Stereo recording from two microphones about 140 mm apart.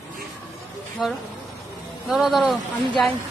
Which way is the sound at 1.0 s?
Centre (ahead or behind).